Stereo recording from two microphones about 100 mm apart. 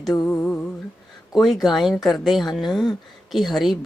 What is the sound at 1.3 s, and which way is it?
A woman's voice, centre (ahead or behind).